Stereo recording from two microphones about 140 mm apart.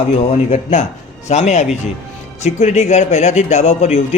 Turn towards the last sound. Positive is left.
turn(degrees=50)  # may be behind; listen again after turning